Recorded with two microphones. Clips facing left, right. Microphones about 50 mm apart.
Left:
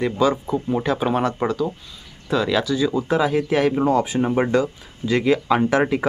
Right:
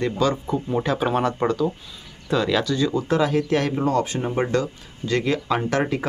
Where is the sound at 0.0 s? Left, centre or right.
Centre.